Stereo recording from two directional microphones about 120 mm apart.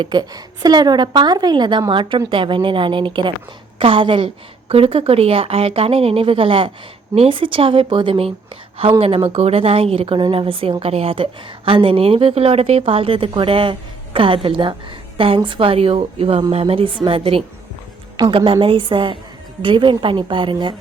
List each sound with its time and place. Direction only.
0.0 s a woman's voice: 35° right (ahead or behind)